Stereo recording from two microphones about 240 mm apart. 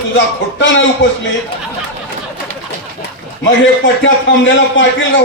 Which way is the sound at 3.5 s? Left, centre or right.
Left.